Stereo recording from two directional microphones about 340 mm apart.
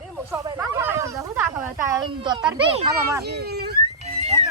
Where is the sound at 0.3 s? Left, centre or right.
Centre.